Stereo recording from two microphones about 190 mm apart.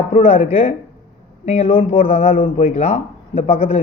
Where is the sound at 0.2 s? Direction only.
30° left (ahead or behind).